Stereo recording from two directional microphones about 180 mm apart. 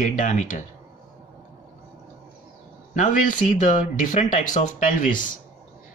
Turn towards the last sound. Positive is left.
turn(degrees=50)  # may be behind; listen again after turning